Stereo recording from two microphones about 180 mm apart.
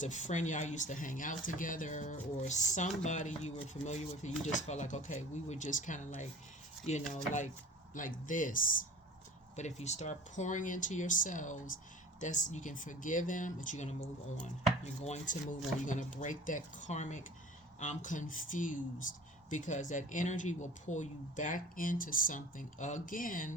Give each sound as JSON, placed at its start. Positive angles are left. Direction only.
{"t": 0.0, "sound": "speech", "side_deg": 40}